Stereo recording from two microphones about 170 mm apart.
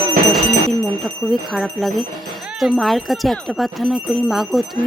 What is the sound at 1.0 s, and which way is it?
Speech, centre (ahead or behind).